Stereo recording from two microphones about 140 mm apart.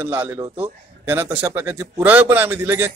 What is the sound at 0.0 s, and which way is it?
A man's voice, 15° right (ahead or behind).